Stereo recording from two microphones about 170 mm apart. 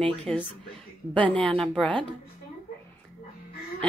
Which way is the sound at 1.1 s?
5° left (ahead or behind).